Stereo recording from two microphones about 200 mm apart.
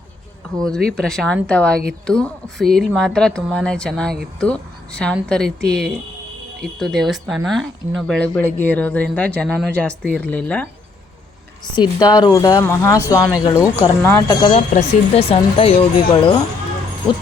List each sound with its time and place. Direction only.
0.9 s speech: centre (ahead or behind)
11.7 s speech: 20° left (ahead or behind)
14.4 s speech: 30° left (ahead or behind)